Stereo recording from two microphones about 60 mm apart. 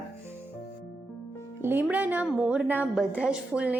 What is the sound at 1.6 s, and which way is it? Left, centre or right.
Speech, right.